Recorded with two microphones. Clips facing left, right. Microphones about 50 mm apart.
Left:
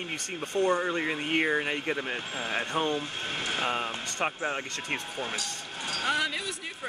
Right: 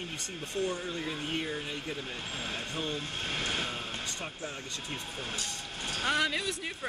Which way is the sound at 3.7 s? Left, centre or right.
Left.